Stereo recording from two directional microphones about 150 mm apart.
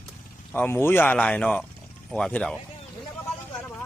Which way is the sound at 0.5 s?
15° left (ahead or behind).